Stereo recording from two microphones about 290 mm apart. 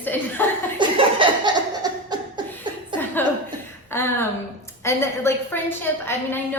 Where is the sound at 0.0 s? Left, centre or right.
Centre.